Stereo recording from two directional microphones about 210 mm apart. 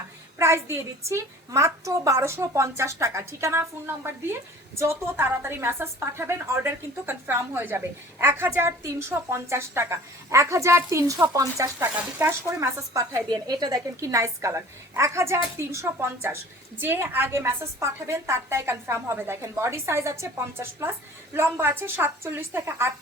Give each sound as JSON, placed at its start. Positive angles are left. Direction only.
{"t": 0.3, "sound": "a woman's voice", "side_deg": -10}